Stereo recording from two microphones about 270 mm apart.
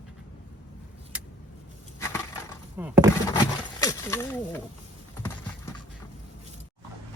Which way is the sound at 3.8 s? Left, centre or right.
Centre.